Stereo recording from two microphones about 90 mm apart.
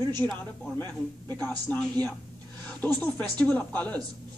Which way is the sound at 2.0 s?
45° right (ahead or behind).